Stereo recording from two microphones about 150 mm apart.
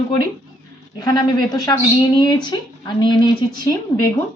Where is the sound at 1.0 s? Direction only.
25° left (ahead or behind).